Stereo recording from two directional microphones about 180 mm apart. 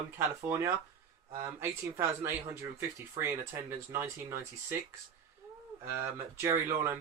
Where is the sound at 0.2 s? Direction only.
15° right (ahead or behind).